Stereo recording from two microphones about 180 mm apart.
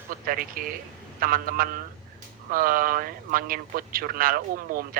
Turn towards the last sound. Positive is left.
turn(degrees=-50)  # may be behind; listen again after turning